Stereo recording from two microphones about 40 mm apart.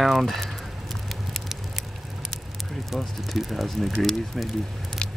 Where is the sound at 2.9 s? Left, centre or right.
Centre.